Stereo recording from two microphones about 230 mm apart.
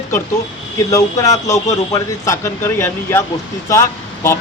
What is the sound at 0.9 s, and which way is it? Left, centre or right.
Speech, centre.